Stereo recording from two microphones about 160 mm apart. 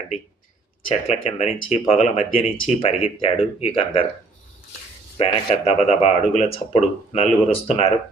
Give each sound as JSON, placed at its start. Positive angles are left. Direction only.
{"t": 1.0, "sound": "speech", "side_deg": 40}
{"t": 5.1, "sound": "speech", "side_deg": 35}